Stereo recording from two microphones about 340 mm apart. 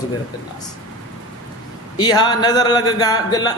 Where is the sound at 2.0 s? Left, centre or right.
Centre.